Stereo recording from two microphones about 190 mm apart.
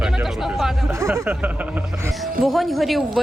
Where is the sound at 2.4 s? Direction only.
Centre (ahead or behind).